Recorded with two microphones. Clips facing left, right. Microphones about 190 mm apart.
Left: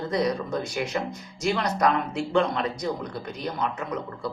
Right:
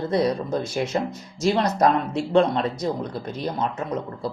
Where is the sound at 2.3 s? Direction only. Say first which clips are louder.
Right 5 dB; 30° right (ahead or behind).